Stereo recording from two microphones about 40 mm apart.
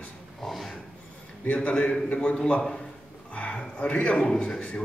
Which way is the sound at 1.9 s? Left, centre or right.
Left.